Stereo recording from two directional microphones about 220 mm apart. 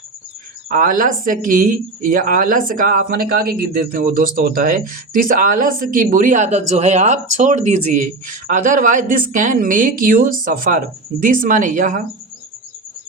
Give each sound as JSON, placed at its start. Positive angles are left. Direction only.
{"t": 0.7, "sound": "speech", "side_deg": -35}